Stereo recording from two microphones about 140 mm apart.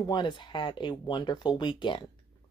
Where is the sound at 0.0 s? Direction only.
30° left (ahead or behind).